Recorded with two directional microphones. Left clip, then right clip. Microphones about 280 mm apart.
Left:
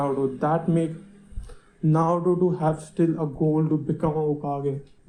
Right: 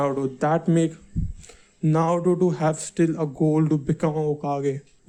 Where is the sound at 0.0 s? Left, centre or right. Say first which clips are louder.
Right 1 dB; right.